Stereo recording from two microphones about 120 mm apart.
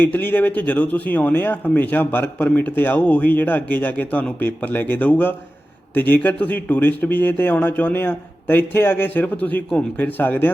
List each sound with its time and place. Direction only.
0.0 s speech: 15° left (ahead or behind)